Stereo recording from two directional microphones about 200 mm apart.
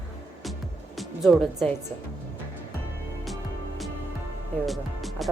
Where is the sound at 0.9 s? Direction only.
Centre (ahead or behind).